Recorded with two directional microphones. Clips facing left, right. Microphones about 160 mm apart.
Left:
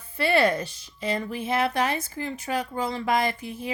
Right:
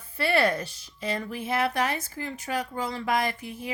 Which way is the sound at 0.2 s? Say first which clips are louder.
Left 2 dB; 20° left (ahead or behind).